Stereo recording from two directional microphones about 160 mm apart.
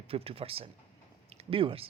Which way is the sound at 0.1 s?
35° right (ahead or behind).